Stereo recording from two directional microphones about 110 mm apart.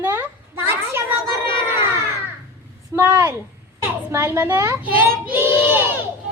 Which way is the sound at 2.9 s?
15° right (ahead or behind).